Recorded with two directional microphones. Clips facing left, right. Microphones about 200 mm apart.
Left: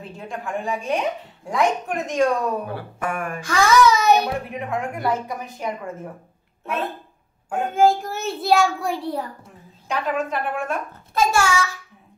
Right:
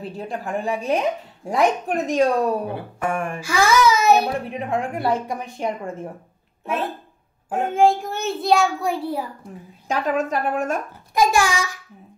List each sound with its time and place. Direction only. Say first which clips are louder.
0.0 s speech: right 3 dB; 35° right (ahead or behind)
2.7 s a sound: right 2 dB; 25° right (ahead or behind)
3.3 s a child's voice: left 2 dB; 5° right (ahead or behind)
4.2 s speech: right 1 dB; 30° right (ahead or behind)
7.7 s a child's voice: even; centre (ahead or behind)
9.8 s a woman's voice: right 2 dB; 40° right (ahead or behind)
11.1 s a child's voice: right 1 dB; 15° right (ahead or behind)